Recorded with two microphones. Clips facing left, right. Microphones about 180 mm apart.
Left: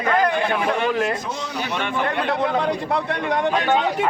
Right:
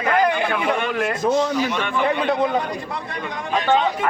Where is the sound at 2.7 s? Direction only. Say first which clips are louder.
Left 6 dB; 65° left (ahead or behind).